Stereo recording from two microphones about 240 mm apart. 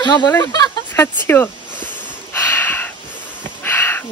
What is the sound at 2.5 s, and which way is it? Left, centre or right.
Gasp, centre.